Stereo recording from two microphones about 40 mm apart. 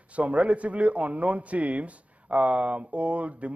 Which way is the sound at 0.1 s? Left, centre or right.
Right.